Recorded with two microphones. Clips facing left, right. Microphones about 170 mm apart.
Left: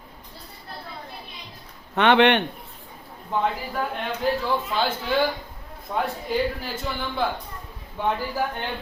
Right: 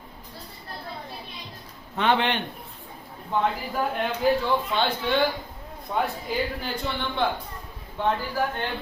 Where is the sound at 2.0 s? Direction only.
70° left (ahead or behind).